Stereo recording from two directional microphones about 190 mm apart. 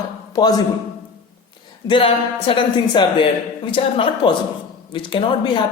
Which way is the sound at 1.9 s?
30° left (ahead or behind).